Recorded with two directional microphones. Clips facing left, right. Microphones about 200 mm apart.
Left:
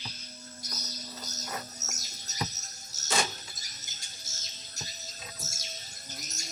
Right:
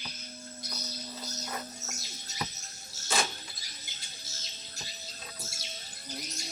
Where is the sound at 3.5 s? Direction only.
45° left (ahead or behind).